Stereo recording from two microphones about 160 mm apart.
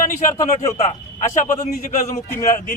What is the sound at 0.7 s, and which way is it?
Speech, 45° left (ahead or behind).